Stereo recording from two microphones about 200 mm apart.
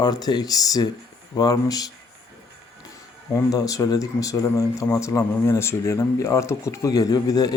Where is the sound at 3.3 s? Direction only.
15° left (ahead or behind).